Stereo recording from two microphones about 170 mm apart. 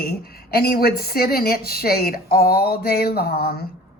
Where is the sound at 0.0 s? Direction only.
65° left (ahead or behind).